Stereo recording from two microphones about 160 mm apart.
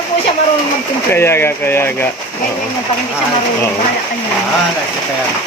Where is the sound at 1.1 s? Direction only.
15° left (ahead or behind).